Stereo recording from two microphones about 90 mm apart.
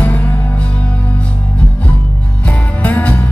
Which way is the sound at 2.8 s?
15° left (ahead or behind).